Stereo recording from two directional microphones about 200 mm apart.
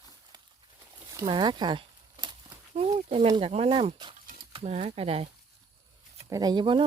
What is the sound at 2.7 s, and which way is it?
Speech, 25° right (ahead or behind).